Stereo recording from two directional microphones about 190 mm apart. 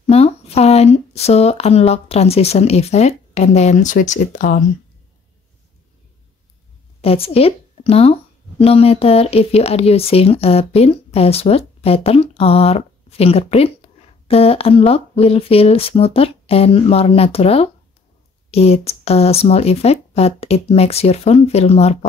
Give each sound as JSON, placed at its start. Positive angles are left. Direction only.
{"t": 0.1, "sound": "speech", "side_deg": 35}
{"t": 7.0, "sound": "speech", "side_deg": 30}